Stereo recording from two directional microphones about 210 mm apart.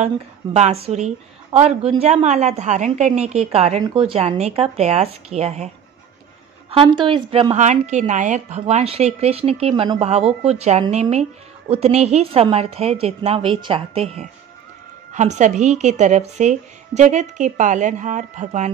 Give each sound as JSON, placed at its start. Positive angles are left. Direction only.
{"t": 0.0, "sound": "a woman's voice", "side_deg": -30}
{"t": 6.7, "sound": "a woman's voice", "side_deg": -25}